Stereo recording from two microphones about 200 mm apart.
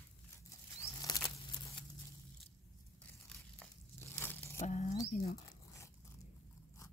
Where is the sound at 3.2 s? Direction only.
10° left (ahead or behind).